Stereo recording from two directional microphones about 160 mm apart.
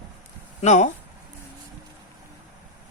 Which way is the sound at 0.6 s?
45° left (ahead or behind).